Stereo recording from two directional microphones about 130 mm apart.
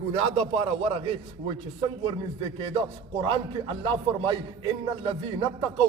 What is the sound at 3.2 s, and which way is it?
Speech, 40° right (ahead or behind).